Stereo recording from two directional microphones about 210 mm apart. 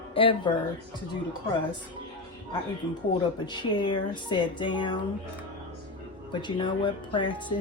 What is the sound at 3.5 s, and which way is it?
Speech, 20° left (ahead or behind).